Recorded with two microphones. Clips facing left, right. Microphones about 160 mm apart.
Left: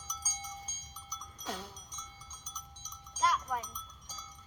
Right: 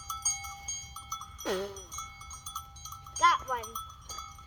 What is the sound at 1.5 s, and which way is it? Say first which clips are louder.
Music: right 10 dB; 65° right (ahead or behind).